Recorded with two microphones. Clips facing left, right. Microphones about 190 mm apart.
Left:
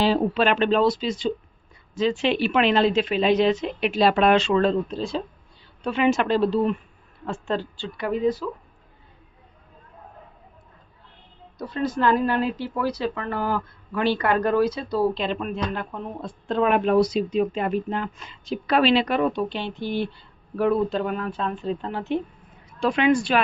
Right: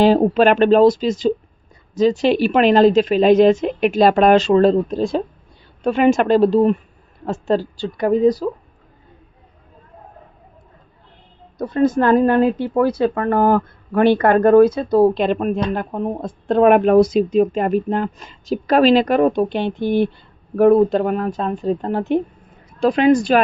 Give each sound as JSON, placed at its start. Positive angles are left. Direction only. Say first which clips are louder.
{"t": 0.0, "sound": "speech", "louder": "right 8 dB", "side_deg": -45}
{"t": 11.6, "sound": "speech", "louder": "right 7 dB", "side_deg": -50}
{"t": 22.8, "sound": "speech", "louder": "right 6 dB", "side_deg": -40}